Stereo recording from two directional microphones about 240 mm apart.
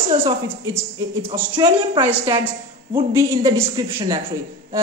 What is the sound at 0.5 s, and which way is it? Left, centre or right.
Speech, centre.